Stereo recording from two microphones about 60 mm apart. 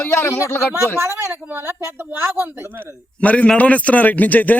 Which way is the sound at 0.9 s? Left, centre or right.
Right.